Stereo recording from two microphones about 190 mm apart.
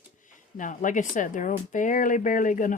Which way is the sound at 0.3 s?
45° left (ahead or behind).